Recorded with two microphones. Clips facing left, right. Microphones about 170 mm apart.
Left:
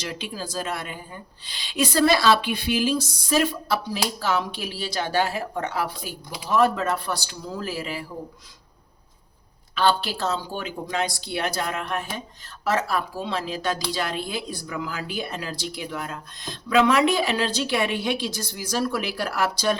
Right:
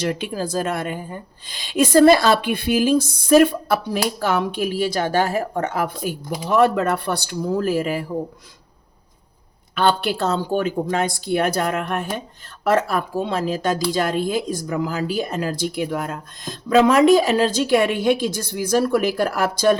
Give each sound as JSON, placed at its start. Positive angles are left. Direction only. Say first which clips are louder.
{"t": 0.0, "sound": "speech", "louder": "right 9 dB", "side_deg": -50}
{"t": 9.7, "sound": "speech", "louder": "right 3 dB", "side_deg": -55}